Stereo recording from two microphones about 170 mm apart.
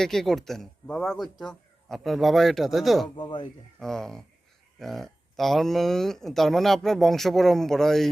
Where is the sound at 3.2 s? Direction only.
25° left (ahead or behind).